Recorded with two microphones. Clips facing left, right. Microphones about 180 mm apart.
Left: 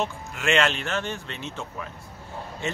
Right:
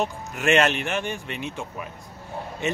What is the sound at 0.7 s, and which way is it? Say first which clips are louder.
Speech: right 2 dB; 15° right (ahead or behind).